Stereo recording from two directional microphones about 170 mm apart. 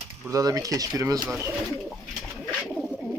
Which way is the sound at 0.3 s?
20° right (ahead or behind).